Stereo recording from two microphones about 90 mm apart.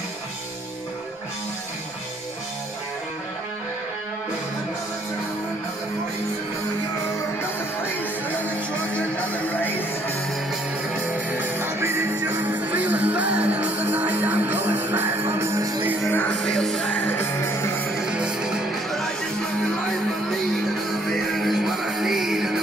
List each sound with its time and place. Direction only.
8.9 s music: 15° left (ahead or behind)
11.1 s music: 20° right (ahead or behind)
16.1 s music: 20° left (ahead or behind)
16.3 s music: 5° left (ahead or behind)
16.9 s music: 20° left (ahead or behind)
18.1 s music: 10° right (ahead or behind)
21.1 s music: centre (ahead or behind)